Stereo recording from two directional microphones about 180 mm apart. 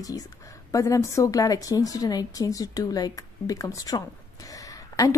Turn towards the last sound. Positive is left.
turn(degrees=20)  # may be behind; listen again after turning